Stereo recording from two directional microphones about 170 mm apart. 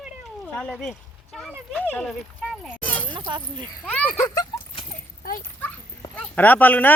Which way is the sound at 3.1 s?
25° right (ahead or behind).